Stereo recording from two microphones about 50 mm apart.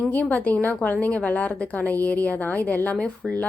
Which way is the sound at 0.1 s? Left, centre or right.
Left.